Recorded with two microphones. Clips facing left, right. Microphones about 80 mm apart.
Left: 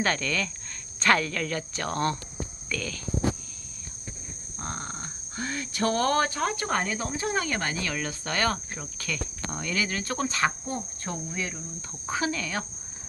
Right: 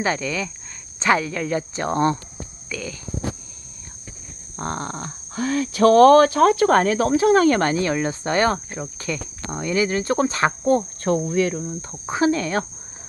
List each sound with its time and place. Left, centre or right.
0.0 s speech: centre
0.9 s cricket: centre
2.6 s a sound: centre
4.5 s speech: right
7.4 s speech: right
7.8 s cricket: right
10.6 s cricket: right
11.8 s cricket: right